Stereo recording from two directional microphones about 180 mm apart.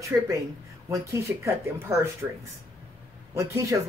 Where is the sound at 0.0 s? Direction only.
15° right (ahead or behind).